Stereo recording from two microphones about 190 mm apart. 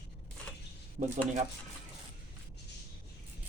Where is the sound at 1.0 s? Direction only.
45° right (ahead or behind).